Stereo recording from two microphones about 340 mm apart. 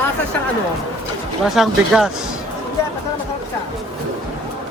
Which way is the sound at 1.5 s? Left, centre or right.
Centre.